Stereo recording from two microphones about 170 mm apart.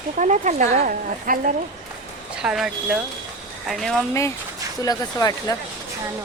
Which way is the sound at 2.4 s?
5° right (ahead or behind).